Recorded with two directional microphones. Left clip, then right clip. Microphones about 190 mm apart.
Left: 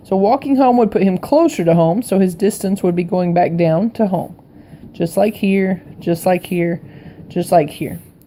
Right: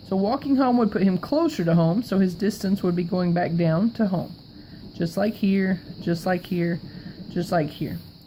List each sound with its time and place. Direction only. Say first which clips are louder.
0.1 s speech: left 10 dB; 20° left (ahead or behind)